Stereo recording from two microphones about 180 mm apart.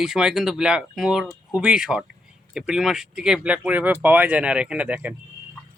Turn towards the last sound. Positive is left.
turn(degrees=-5)  # may be behind; listen again after turning